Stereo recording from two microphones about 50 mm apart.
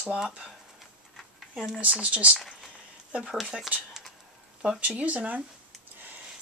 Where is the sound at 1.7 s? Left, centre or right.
Right.